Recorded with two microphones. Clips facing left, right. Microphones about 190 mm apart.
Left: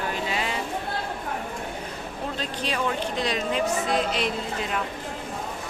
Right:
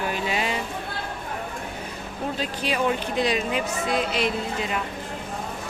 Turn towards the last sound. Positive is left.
turn(degrees=0)  # may be behind; listen again after turning